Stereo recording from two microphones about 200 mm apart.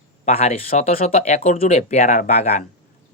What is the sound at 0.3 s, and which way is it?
Speech, 30° left (ahead or behind).